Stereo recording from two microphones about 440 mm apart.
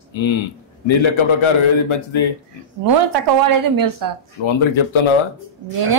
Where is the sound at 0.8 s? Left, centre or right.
Left.